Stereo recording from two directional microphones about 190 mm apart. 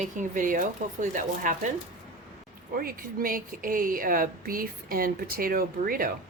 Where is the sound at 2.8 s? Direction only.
50° right (ahead or behind).